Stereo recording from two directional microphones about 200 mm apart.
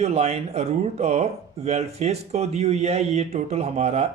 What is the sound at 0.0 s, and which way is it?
Speech, 30° right (ahead or behind).